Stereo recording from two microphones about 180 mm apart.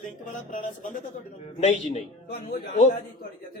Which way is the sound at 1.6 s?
35° left (ahead or behind).